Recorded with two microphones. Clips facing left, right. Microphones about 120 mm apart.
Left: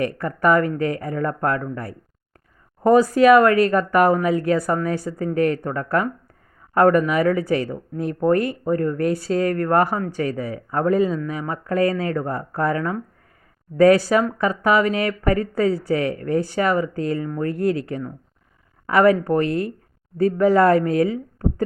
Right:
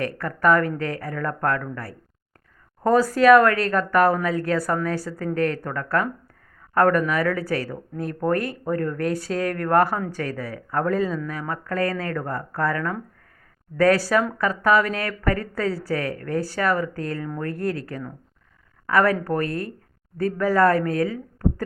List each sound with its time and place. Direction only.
0.2 s speech: 15° left (ahead or behind)
17.2 s speech: 5° left (ahead or behind)